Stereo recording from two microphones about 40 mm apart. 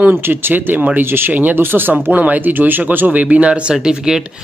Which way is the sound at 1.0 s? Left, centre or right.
Right.